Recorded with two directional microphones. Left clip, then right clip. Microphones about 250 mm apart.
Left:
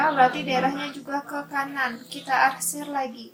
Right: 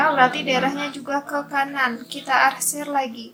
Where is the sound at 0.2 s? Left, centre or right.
Right.